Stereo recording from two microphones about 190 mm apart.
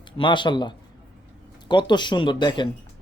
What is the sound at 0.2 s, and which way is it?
Speech, 25° left (ahead or behind).